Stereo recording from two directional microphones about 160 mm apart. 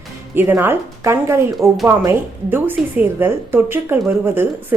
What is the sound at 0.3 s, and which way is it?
Speech, 15° right (ahead or behind).